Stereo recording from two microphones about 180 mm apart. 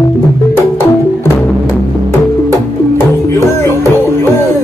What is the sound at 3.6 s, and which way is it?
Music, 15° left (ahead or behind).